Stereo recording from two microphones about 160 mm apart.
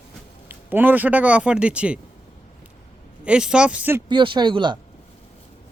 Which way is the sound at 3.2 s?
5° right (ahead or behind).